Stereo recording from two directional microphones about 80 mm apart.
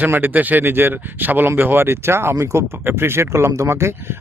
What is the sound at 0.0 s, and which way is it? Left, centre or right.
Speech, right.